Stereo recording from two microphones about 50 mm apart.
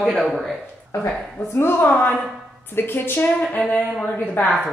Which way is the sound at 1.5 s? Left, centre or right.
Left.